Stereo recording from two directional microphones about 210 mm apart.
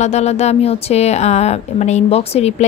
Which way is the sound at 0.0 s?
30° left (ahead or behind).